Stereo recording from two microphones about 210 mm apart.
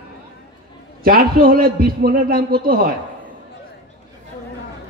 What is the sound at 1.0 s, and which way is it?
A man's voice, 45° right (ahead or behind).